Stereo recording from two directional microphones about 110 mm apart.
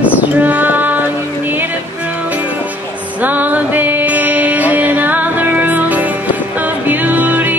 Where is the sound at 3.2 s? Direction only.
15° right (ahead or behind).